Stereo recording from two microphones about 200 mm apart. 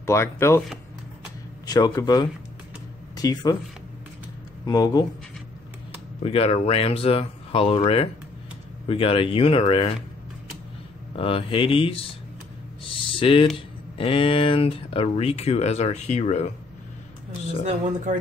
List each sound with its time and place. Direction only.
0.0 s speech: 15° left (ahead or behind)
1.7 s speech: 20° left (ahead or behind)
4.6 s speech: 20° left (ahead or behind)
6.2 s speech: 30° left (ahead or behind)
11.1 s speech: 25° left (ahead or behind)
12.8 s a sound: 25° left (ahead or behind)
13.9 s speech: 25° left (ahead or behind)